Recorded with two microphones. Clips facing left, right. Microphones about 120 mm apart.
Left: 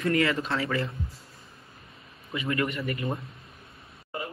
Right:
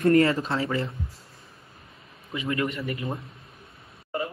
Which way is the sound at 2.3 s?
25° right (ahead or behind).